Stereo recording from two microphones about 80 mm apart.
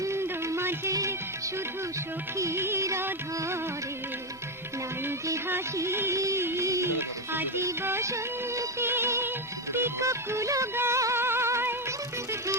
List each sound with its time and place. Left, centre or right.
0.0 s a sound: right
2.4 s music: right
5.7 s music: right